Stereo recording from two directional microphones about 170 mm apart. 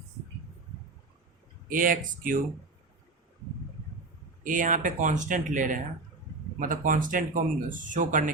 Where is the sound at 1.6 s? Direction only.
55° right (ahead or behind).